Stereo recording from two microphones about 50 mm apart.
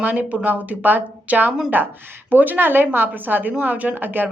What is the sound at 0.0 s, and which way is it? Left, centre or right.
A woman's voice, right.